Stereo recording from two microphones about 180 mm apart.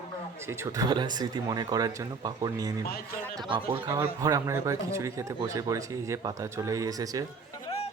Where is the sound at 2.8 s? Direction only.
55° left (ahead or behind).